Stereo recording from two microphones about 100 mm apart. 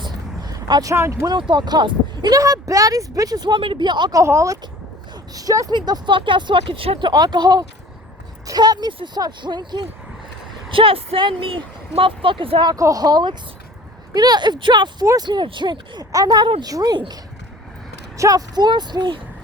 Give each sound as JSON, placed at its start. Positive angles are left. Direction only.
{"t": 0.0, "sound": "vehicle", "side_deg": -40}
{"t": 0.9, "sound": "speech", "side_deg": -25}
{"t": 1.3, "sound": "speech", "side_deg": -50}
{"t": 2.3, "sound": "speech", "side_deg": -35}
{"t": 3.6, "sound": "speech", "side_deg": -55}
{"t": 4.2, "sound": "speech", "side_deg": -30}
{"t": 7.0, "sound": "speech", "side_deg": -45}
{"t": 10.7, "sound": "speech", "side_deg": -65}
{"t": 12.7, "sound": "speech", "side_deg": -35}
{"t": 18.2, "sound": "speech", "side_deg": -35}